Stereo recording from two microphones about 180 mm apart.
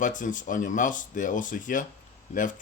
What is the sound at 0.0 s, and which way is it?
Speech, 45° left (ahead or behind).